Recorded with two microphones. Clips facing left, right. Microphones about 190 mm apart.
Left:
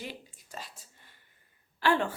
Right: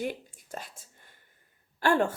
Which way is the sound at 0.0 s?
50° right (ahead or behind).